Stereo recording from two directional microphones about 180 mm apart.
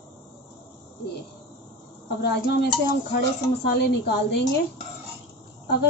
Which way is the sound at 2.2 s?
60° left (ahead or behind).